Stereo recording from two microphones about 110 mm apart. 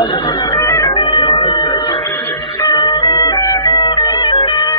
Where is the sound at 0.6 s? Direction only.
25° left (ahead or behind).